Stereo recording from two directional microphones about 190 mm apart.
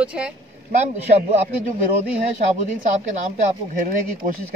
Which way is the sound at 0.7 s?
35° right (ahead or behind).